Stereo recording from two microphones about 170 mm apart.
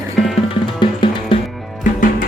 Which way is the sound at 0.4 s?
30° left (ahead or behind).